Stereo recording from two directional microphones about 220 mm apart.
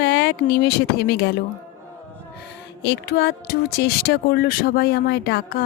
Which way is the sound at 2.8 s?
50° left (ahead or behind).